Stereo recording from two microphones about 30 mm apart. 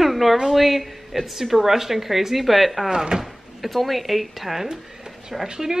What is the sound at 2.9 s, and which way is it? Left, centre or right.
Speech, right.